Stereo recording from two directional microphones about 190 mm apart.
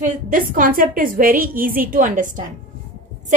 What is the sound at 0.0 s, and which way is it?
A woman's voice, 45° right (ahead or behind).